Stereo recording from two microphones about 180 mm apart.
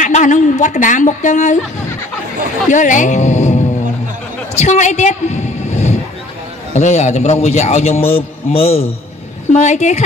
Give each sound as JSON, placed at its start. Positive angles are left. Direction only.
{"t": 0.0, "sound": "speech", "side_deg": 45}
{"t": 2.7, "sound": "a woman's voice", "side_deg": 45}